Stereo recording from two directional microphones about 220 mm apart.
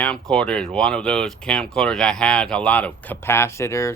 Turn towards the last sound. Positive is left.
turn(degrees=15)  # may be behind; listen again after turning